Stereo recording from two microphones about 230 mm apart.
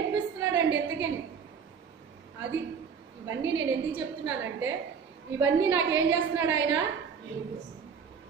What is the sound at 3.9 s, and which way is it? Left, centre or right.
A woman's voice, centre.